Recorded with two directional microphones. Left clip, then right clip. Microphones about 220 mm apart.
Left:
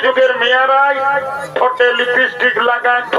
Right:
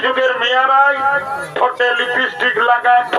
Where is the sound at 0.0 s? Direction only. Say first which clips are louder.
Left 3 dB; 30° left (ahead or behind).